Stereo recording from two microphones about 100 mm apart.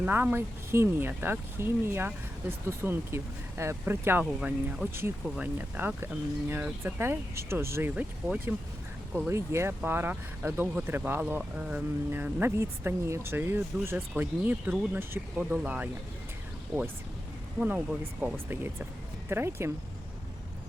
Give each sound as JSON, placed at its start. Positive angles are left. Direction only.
{"t": 0.0, "sound": "speech", "side_deg": -20}
{"t": 4.2, "sound": "speech", "side_deg": -10}
{"t": 17.6, "sound": "speech", "side_deg": -15}